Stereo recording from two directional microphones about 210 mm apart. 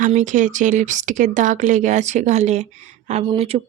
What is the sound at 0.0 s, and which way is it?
Speech, 35° right (ahead or behind).